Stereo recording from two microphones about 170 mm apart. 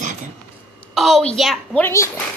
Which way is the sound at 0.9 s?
Centre (ahead or behind).